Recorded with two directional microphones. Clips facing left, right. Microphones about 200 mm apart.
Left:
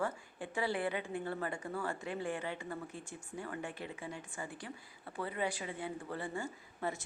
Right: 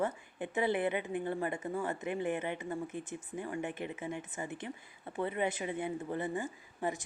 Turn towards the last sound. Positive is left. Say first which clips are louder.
# right 3 dB
turn(degrees=-15)  # may be behind; listen again after turning